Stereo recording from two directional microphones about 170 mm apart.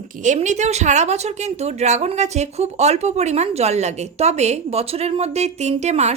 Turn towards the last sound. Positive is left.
turn(degrees=-40)  # may be behind; listen again after turning